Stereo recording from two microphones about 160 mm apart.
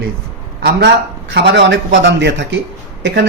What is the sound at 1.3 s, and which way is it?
A man's voice, 90° right.